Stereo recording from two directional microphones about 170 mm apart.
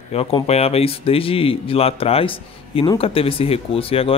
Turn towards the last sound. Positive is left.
turn(degrees=35)  # may be behind; listen again after turning